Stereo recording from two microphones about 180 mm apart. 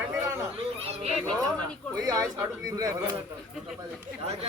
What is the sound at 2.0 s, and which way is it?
Speech, 20° right (ahead or behind).